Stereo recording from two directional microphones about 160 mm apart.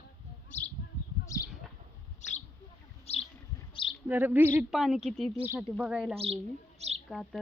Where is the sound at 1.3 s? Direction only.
20° left (ahead or behind).